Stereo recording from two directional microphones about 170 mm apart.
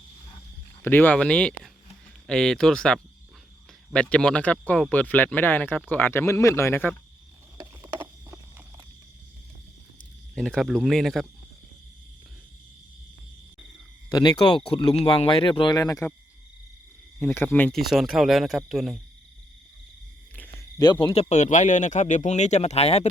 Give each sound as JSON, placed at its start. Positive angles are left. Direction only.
{"t": 0.9, "sound": "speech", "side_deg": 10}
{"t": 7.6, "sound": "a sound", "side_deg": -20}
{"t": 10.3, "sound": "speech", "side_deg": 0}
{"t": 14.1, "sound": "speech", "side_deg": 25}
{"t": 17.2, "sound": "speech", "side_deg": 10}
{"t": 20.3, "sound": "a sound", "side_deg": 10}
{"t": 20.7, "sound": "speech", "side_deg": 25}
{"t": 21.2, "sound": "speech", "side_deg": 40}